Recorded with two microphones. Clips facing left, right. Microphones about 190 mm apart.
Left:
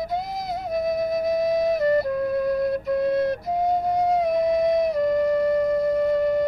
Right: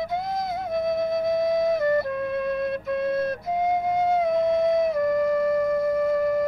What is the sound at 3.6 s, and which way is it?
Flute, centre (ahead or behind).